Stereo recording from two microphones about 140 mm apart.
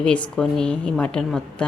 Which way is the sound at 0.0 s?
10° left (ahead or behind).